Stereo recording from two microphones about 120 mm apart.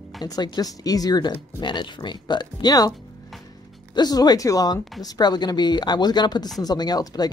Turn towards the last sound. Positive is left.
turn(degrees=35)  # may be behind; listen again after turning